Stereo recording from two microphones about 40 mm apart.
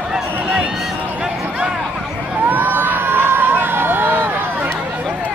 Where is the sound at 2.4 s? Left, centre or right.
Right.